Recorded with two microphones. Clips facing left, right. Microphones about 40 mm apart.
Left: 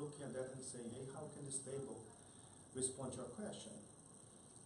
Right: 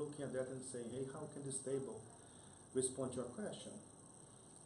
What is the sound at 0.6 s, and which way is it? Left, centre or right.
A man's voice, centre.